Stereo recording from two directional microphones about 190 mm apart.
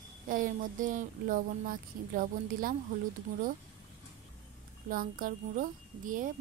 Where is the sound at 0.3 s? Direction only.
45° right (ahead or behind).